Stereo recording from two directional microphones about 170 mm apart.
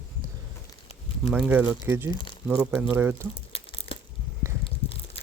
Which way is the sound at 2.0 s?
25° left (ahead or behind).